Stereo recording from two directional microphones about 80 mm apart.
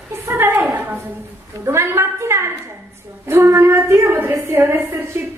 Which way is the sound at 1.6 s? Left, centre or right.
Right.